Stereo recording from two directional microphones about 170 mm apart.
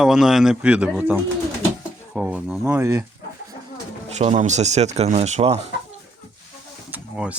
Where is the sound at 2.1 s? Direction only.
5° right (ahead or behind).